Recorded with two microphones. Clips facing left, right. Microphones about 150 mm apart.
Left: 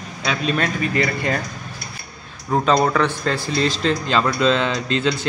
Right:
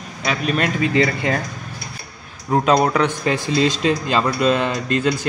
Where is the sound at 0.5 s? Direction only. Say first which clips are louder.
Right 5 dB; 20° right (ahead or behind).